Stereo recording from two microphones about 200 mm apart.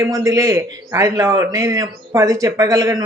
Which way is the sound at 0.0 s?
15° right (ahead or behind).